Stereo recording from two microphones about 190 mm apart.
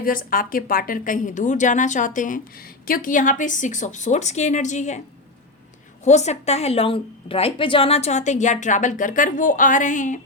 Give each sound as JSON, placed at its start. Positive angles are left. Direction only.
{"t": 0.0, "sound": "a woman's voice", "side_deg": 50}
{"t": 6.1, "sound": "a woman's voice", "side_deg": 35}